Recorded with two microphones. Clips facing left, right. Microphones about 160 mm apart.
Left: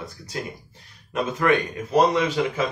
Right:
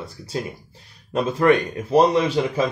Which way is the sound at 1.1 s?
30° right (ahead or behind).